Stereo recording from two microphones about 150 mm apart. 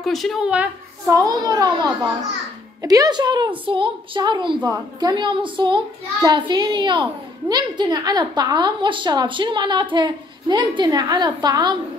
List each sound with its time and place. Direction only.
0.0 s a woman's voice: centre (ahead or behind)
1.0 s a woman's voice: 25° right (ahead or behind)